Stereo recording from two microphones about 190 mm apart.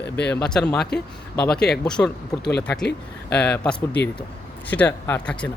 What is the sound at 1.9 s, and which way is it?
Speech, 5° left (ahead or behind).